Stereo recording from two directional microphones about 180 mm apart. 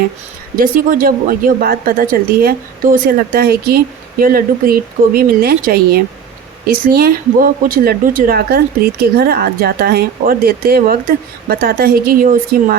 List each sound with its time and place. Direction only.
0.6 s a woman's voice: 50° right (ahead or behind)